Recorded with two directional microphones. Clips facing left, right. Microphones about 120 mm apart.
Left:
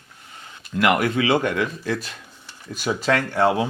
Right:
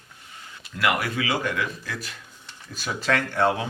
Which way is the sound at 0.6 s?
Centre (ahead or behind).